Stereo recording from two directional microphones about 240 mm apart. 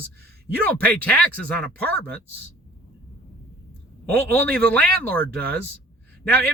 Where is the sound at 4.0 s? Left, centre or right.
Centre.